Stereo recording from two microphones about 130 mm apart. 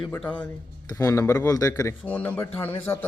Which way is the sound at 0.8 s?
25° left (ahead or behind).